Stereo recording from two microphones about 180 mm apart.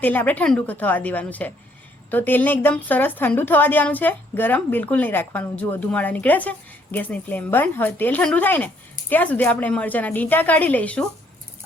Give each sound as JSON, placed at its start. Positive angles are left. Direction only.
{"t": 0.0, "sound": "a woman's voice", "side_deg": 10}